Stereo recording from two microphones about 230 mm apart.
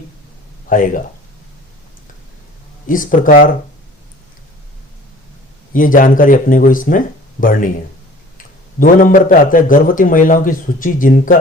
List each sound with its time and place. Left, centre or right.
0.7 s a man's voice: left
2.8 s a man's voice: left
5.7 s a man's voice: left
8.8 s a man's voice: left